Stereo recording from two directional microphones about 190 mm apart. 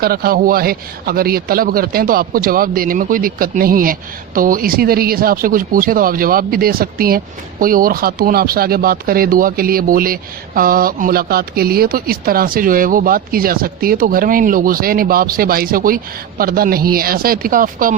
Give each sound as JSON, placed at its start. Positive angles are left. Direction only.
{"t": 0.0, "sound": "speech", "side_deg": -50}